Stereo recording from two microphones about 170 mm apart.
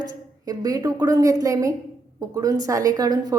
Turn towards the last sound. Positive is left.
turn(degrees=-20)  # may be behind; listen again after turning